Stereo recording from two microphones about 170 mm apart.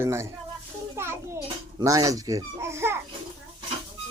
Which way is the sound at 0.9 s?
15° right (ahead or behind).